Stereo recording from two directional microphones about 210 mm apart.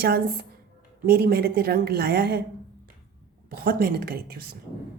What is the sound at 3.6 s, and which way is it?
Speech, 45° right (ahead or behind).